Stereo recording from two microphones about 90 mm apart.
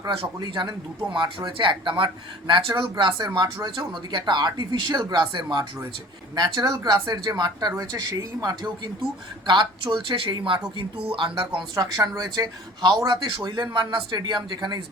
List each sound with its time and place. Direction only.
0.3 s speech: 55° right (ahead or behind)
3.2 s speech: 45° right (ahead or behind)
9.5 s speech: 60° right (ahead or behind)
11.7 s speech: 40° right (ahead or behind)